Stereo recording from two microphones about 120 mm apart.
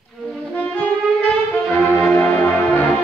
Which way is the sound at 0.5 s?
15° left (ahead or behind).